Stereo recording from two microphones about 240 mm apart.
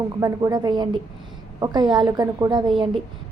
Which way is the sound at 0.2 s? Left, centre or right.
Centre.